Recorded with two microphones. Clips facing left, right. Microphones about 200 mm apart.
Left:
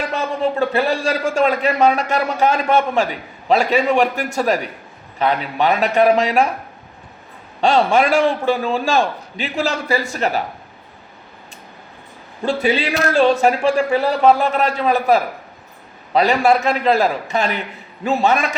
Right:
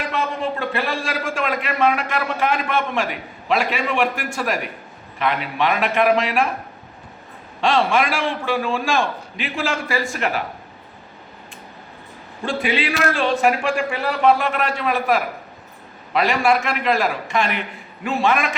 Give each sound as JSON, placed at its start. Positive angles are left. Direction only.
{"t": 0.1, "sound": "a man's voice", "side_deg": 40}
{"t": 7.6, "sound": "a man's voice", "side_deg": 40}
{"t": 12.4, "sound": "a man's voice", "side_deg": 40}